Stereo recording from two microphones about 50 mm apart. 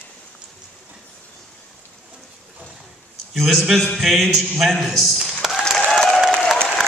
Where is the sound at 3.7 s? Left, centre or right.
Centre.